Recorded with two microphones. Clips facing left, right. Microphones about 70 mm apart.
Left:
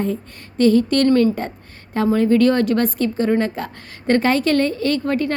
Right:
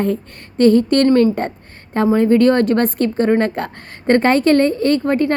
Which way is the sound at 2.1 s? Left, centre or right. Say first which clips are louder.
Right 3 dB; right.